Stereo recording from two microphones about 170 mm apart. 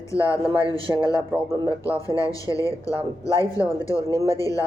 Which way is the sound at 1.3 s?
20° right (ahead or behind).